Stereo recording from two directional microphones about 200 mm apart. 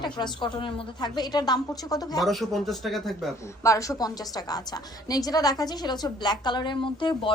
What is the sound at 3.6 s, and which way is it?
A woman's voice, 15° left (ahead or behind).